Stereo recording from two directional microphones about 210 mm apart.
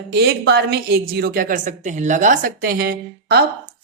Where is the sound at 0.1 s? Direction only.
50° right (ahead or behind).